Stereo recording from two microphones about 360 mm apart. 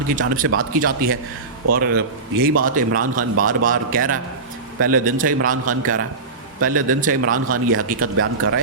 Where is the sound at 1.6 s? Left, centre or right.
Right.